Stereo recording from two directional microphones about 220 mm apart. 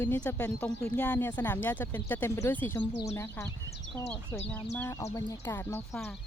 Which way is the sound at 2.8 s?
20° left (ahead or behind).